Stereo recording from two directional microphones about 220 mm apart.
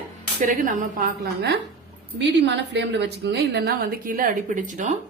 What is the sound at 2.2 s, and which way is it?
A woman's voice, 55° right (ahead or behind).